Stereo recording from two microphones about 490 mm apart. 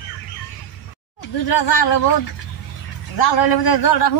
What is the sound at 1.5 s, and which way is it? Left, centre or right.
Speech, left.